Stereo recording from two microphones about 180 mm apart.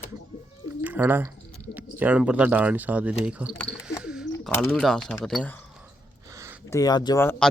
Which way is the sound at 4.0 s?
5° right (ahead or behind).